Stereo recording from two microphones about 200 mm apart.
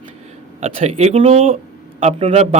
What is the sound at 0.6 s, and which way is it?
A man's voice, 30° right (ahead or behind).